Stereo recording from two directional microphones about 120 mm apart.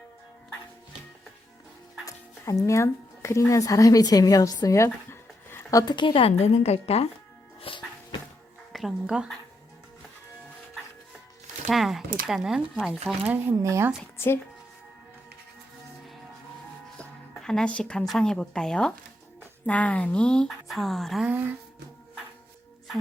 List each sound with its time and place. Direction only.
2.0 s music: 25° left (ahead or behind)
2.6 s speech: 25° left (ahead or behind)
5.5 s a sound: 20° left (ahead or behind)
5.8 s a woman's voice: 40° left (ahead or behind)
6.4 s a woman's voice: 60° left (ahead or behind)
7.6 s music: 45° left (ahead or behind)
8.7 s speech: 5° right (ahead or behind)
11.7 s speech: centre (ahead or behind)
13.6 s speech: 25° right (ahead or behind)
17.0 s speech: 5° left (ahead or behind)